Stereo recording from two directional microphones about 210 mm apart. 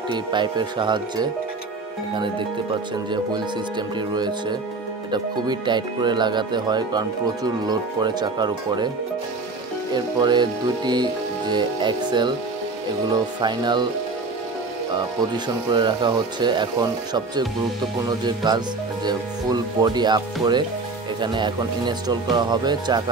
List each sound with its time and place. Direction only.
0.1 s speech: 20° right (ahead or behind)
9.9 s speech: 20° right (ahead or behind)
15.3 s speech: 20° right (ahead or behind)
18.0 s speech: 20° right (ahead or behind)
21.2 s speech: 20° right (ahead or behind)